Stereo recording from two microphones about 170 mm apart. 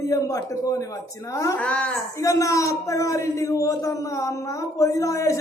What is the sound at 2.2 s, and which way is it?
A man's voice, 20° left (ahead or behind).